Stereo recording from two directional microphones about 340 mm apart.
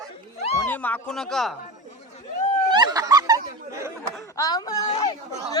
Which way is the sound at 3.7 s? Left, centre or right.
Centre.